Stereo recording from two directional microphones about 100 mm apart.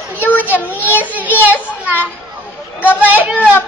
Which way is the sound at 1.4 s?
15° right (ahead or behind).